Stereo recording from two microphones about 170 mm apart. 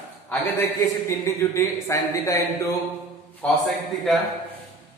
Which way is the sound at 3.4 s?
5° left (ahead or behind).